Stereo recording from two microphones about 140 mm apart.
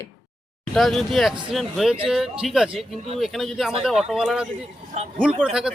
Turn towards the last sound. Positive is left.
turn(degrees=-5)  # may be behind; listen again after turning